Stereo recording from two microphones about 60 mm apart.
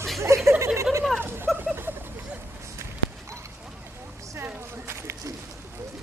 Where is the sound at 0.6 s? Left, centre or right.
Right.